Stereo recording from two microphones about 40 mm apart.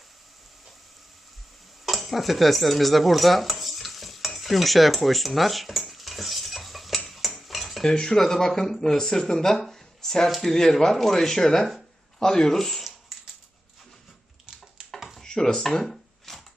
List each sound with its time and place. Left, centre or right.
1.8 s speech: centre
5.9 s stir: centre
7.9 s speech: centre
10.2 s speech: centre
10.5 s speech: centre
14.8 s a sound: centre
15.2 s dishes: centre
15.8 s a sound: centre